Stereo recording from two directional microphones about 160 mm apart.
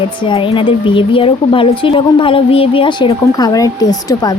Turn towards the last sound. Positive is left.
turn(degrees=20)  # may be behind; listen again after turning